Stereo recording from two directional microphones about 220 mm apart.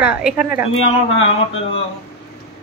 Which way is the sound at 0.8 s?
25° left (ahead or behind).